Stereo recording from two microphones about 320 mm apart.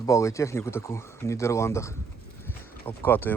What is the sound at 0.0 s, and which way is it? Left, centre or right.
Speech, centre.